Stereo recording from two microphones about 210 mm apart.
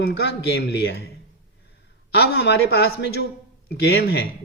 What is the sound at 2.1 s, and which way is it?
A man's voice, 50° left (ahead or behind).